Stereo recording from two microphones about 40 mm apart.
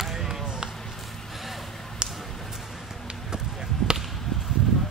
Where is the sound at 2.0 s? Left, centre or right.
Centre.